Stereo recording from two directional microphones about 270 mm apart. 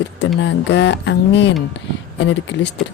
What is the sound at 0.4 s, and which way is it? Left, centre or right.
Speech, left.